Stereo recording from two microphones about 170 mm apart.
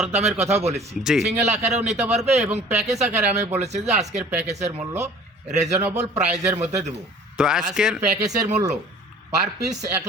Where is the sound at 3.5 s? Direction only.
40° right (ahead or behind).